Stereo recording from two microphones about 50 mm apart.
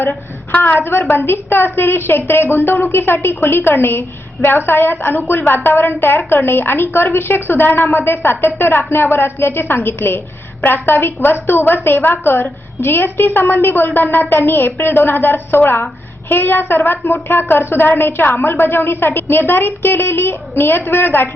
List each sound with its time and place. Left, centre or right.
0.6 s a woman's voice: left